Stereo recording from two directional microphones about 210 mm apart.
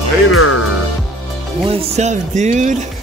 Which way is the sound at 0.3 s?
90° left.